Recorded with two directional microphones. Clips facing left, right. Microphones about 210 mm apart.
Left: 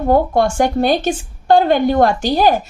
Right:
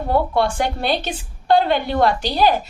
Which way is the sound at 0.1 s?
45° left (ahead or behind).